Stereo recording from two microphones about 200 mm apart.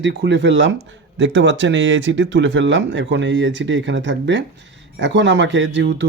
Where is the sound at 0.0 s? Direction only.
60° right (ahead or behind).